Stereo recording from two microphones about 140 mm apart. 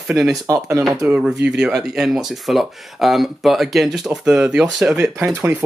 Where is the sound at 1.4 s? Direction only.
5° right (ahead or behind).